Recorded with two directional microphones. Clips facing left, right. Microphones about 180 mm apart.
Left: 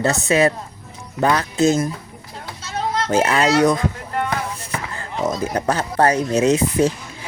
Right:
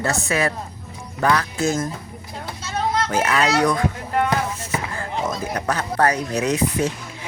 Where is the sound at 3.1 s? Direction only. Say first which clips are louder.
Left 6 dB; 25° left (ahead or behind).